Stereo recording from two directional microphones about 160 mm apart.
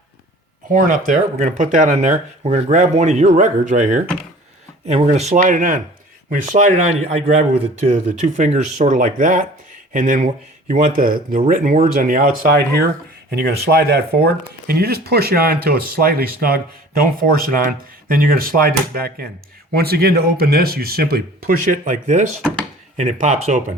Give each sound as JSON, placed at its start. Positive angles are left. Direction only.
{"t": 0.7, "sound": "speech", "side_deg": -55}
{"t": 8.4, "sound": "speech", "side_deg": -50}
{"t": 13.3, "sound": "speech", "side_deg": -80}